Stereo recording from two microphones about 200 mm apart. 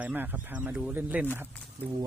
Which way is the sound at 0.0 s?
10° right (ahead or behind).